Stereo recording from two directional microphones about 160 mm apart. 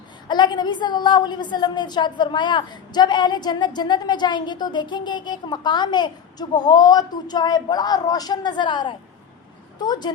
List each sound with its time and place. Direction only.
0.3 s a woman's voice: 30° left (ahead or behind)